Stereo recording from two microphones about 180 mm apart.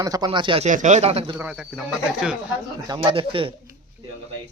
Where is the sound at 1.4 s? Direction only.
5° right (ahead or behind).